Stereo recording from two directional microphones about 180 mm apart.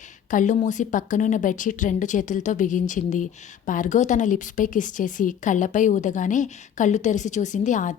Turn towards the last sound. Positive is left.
turn(degrees=45)  # may be behind; listen again after turning